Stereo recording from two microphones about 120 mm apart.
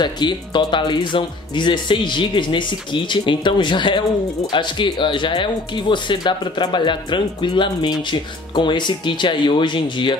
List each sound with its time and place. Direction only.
0.0 s speech: 40° left (ahead or behind)